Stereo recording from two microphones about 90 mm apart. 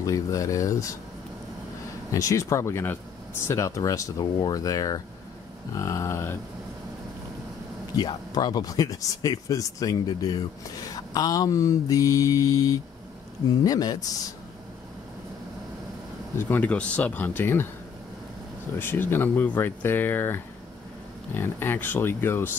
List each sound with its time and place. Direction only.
0.0 s mantra: 40° left (ahead or behind)
2.1 s mantra: 35° left (ahead or behind)
8.0 s speech: 50° left (ahead or behind)
11.0 s mantra: 45° left (ahead or behind)
13.7 s speech: 45° left (ahead or behind)
16.3 s speech: 20° left (ahead or behind)
18.8 s speech: 25° left (ahead or behind)